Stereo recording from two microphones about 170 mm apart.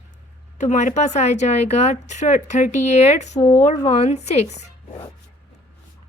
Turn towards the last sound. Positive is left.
turn(degrees=40)  # may be behind; listen again after turning